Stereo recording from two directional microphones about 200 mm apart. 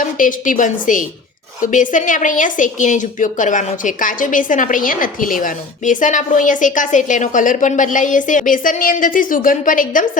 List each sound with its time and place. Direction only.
0.0 s a woman's voice: 40° left (ahead or behind)